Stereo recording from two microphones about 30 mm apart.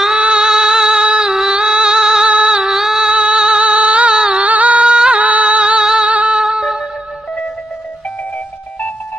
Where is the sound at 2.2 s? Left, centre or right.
Right.